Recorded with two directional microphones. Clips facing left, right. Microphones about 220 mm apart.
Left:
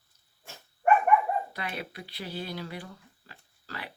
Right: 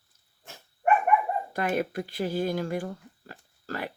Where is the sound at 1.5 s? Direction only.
45° right (ahead or behind).